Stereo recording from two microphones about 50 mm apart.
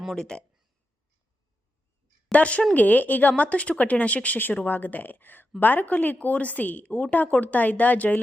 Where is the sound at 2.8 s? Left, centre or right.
Left.